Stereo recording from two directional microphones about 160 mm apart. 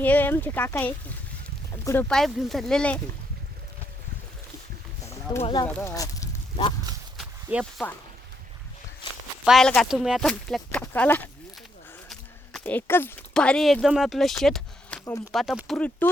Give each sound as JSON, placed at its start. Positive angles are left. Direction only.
{"t": 0.0, "sound": "speech", "side_deg": 10}
{"t": 2.0, "sound": "speech", "side_deg": 0}
{"t": 5.4, "sound": "speech", "side_deg": 30}
{"t": 5.6, "sound": "speech", "side_deg": 10}
{"t": 5.9, "sound": "a sound", "side_deg": 20}
{"t": 7.2, "sound": "a sound", "side_deg": 0}
{"t": 9.4, "sound": "speech", "side_deg": 0}
{"t": 12.5, "sound": "speech", "side_deg": 10}
{"t": 15.0, "sound": "speech", "side_deg": 20}
{"t": 15.3, "sound": "speech", "side_deg": 0}